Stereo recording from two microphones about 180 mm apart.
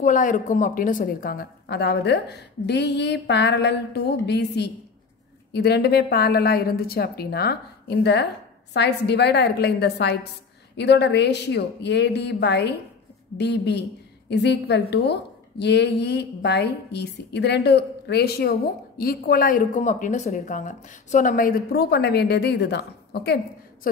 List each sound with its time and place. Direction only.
0.0 s a woman's voice: 45° left (ahead or behind); by 23.9 s 60° left (ahead or behind)